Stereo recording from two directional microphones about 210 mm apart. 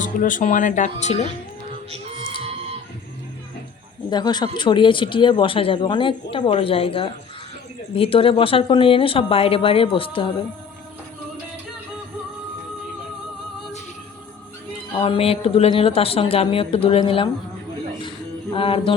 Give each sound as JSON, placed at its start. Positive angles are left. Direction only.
{"t": 0.0, "sound": "speech", "side_deg": 40}
{"t": 4.1, "sound": "a woman's voice", "side_deg": 20}
{"t": 14.9, "sound": "a woman's voice", "side_deg": 25}
{"t": 18.5, "sound": "a woman's voice", "side_deg": 25}